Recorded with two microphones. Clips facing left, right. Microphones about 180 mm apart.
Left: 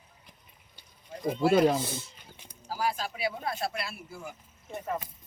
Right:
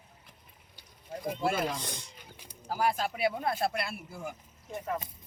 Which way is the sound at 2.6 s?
55° right (ahead or behind).